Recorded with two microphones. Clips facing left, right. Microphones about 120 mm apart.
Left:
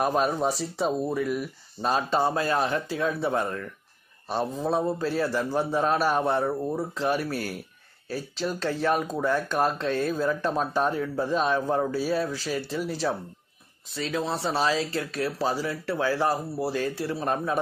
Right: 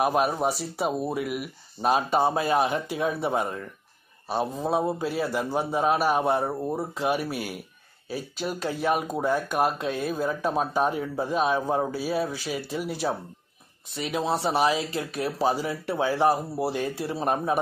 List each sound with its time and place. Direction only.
0.0 s speech: 10° right (ahead or behind)
4.6 s speech: 15° right (ahead or behind)